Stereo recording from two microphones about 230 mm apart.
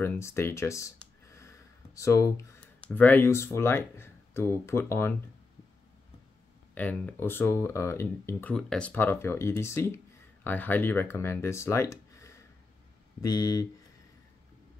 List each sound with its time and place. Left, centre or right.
0.0 s speech: centre
6.7 s speech: centre